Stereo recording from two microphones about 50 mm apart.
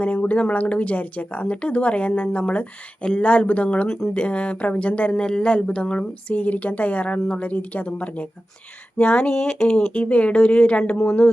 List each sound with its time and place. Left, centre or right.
0.0 s speech: left
3.8 s speech: centre
4.1 s speech: left
5.1 s speech: centre